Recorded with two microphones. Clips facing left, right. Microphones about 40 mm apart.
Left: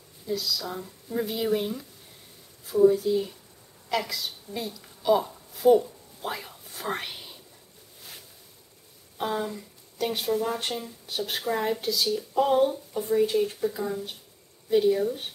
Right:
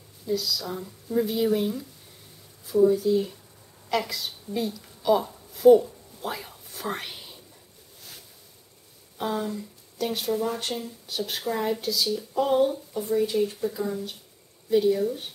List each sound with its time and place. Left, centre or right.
0.3 s speech: centre
2.9 s a woman's voice: centre
9.2 s speech: centre
11.8 s speech: left
12.1 s speech: centre